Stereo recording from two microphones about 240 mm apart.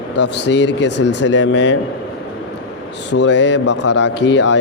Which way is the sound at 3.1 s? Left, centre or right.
Left.